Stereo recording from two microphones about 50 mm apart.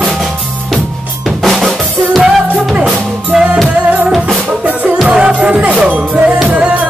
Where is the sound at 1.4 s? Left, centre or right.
Centre.